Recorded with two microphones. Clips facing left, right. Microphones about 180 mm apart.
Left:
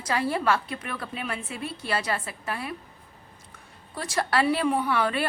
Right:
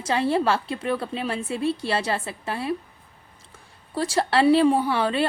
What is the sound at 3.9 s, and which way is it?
A woman's voice, 30° right (ahead or behind).